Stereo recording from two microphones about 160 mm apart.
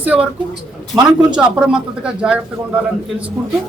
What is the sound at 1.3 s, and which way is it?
A man's voice, 5° right (ahead or behind).